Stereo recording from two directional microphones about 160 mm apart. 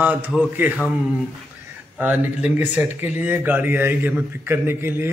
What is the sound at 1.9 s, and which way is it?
Speech, 10° right (ahead or behind).